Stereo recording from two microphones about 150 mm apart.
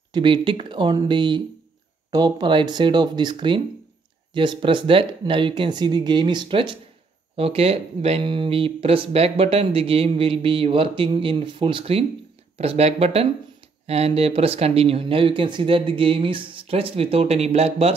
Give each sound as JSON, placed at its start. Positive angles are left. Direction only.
{"t": 0.1, "sound": "speech", "side_deg": -35}